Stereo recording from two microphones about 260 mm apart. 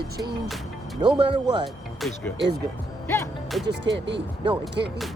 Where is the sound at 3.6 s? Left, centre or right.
Right.